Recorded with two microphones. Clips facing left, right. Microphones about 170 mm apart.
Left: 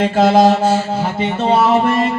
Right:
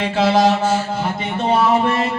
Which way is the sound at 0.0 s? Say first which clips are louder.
Left 4 dB; 45° left (ahead or behind).